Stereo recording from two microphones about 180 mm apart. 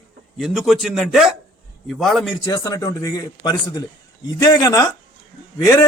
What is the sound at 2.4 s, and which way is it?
A man's voice, 20° left (ahead or behind).